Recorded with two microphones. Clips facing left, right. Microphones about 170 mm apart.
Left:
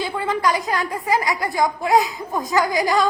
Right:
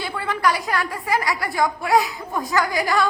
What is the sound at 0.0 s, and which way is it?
A woman's voice, 20° left (ahead or behind).